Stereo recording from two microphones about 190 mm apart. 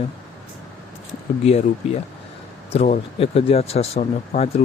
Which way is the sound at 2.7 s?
35° left (ahead or behind).